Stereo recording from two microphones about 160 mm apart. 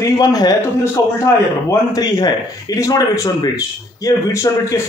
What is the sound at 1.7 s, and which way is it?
Speech, 25° left (ahead or behind).